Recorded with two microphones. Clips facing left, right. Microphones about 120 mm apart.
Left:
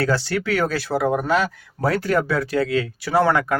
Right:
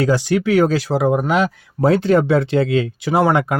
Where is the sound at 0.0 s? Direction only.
15° right (ahead or behind).